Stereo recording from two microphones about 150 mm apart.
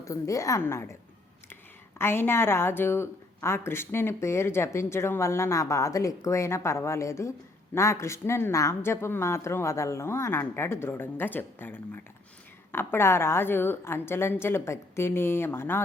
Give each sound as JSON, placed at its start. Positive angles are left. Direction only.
{"t": 0.0, "sound": "a woman's voice", "side_deg": 20}
{"t": 2.0, "sound": "speech", "side_deg": 15}